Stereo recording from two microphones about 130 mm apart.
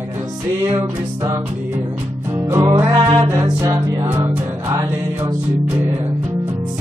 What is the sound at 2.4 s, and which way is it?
Music, 25° right (ahead or behind).